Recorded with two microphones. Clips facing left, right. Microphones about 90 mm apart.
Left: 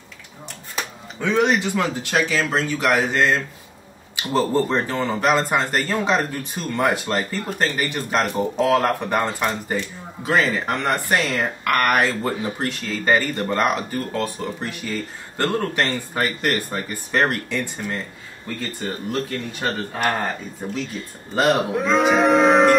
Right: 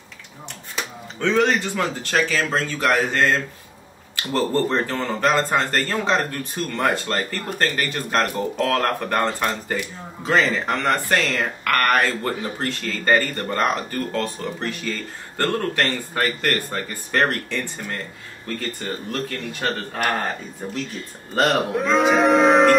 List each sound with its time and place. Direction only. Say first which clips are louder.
1.2 s speech: even; 15° left (ahead or behind)
19.6 s speech: left 1 dB; 5° left (ahead or behind)